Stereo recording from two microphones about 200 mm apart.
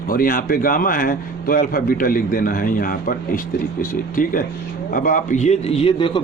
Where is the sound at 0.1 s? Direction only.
45° left (ahead or behind).